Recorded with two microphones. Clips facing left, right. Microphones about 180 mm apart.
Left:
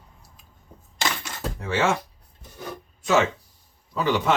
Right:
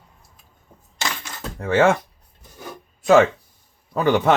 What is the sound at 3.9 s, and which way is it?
Speech, 55° right (ahead or behind).